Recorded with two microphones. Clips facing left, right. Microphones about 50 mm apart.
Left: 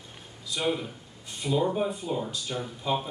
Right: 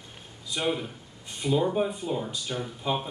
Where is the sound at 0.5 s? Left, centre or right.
Right.